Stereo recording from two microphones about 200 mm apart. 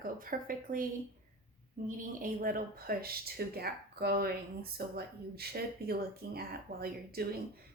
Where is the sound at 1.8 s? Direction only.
40° right (ahead or behind).